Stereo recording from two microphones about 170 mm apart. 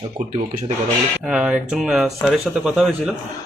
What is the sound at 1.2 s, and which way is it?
A man's voice, 5° right (ahead or behind).